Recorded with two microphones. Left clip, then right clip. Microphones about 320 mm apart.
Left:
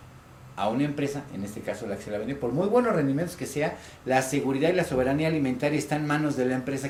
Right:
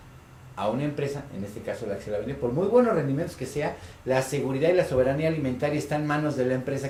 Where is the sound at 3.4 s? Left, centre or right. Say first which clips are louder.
Left 1 dB; right.